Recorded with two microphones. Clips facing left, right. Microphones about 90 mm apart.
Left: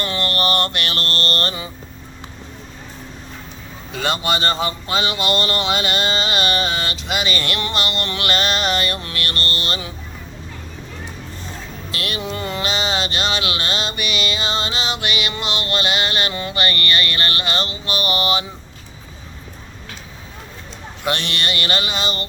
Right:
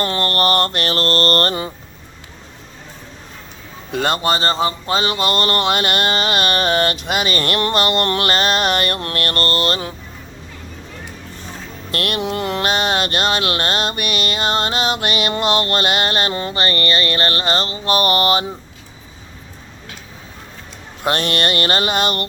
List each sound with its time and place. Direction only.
0.0 s mantra: 40° right (ahead or behind)
3.9 s mantra: 45° right (ahead or behind)
11.9 s mantra: 55° right (ahead or behind)
21.0 s mantra: 45° right (ahead or behind)